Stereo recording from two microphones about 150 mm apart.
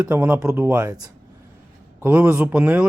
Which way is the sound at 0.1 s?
10° right (ahead or behind).